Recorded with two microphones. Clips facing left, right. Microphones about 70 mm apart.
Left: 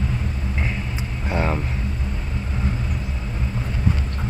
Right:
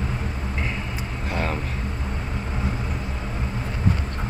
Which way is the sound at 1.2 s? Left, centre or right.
Centre.